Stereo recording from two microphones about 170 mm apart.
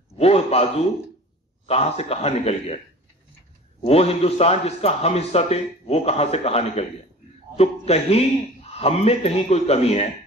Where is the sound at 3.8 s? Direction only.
35° left (ahead or behind).